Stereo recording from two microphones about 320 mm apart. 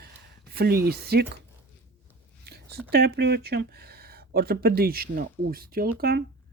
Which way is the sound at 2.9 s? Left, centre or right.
Right.